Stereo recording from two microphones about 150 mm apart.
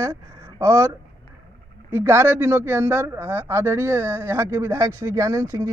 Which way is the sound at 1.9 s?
15° right (ahead or behind).